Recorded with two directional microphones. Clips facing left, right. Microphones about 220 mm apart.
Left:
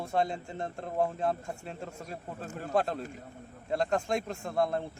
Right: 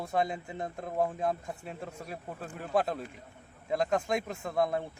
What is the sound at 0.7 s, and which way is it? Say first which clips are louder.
A man's voice: even; 15° right (ahead or behind).